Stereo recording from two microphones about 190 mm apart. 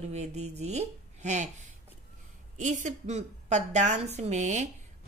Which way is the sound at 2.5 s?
40° right (ahead or behind).